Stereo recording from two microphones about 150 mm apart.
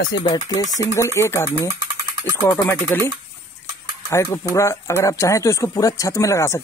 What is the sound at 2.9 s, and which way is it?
Speech, 15° left (ahead or behind).